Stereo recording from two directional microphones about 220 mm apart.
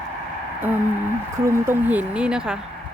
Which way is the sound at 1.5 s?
10° right (ahead or behind).